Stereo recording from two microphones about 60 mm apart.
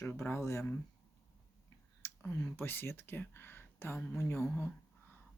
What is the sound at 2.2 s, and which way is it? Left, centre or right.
Speech, left.